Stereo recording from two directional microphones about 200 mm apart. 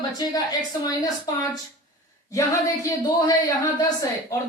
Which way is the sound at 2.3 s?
15° left (ahead or behind).